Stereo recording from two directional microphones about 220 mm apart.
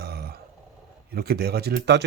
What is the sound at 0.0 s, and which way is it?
Grunt, 45° right (ahead or behind).